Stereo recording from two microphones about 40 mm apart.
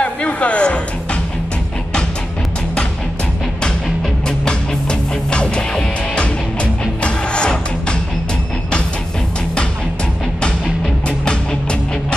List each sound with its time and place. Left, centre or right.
0.0 s music: left
4.5 s music: left